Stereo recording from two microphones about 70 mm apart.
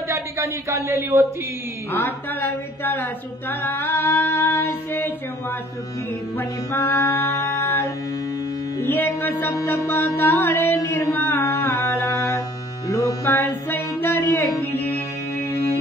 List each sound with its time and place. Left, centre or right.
0.1 s a woman's voice: right
2.8 s a sound: left
4.2 s music: left
6.3 s music: left
8.8 s a sound: left
9.7 s music: left
12.8 s music: left
13.2 s music: left